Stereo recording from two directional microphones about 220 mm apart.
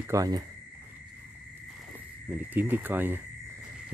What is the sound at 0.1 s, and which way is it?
Speech, 15° right (ahead or behind).